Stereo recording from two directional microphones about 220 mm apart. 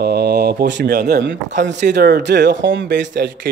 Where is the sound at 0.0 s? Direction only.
45° right (ahead or behind).